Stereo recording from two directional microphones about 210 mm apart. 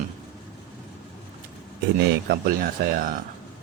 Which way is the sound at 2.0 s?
50° right (ahead or behind).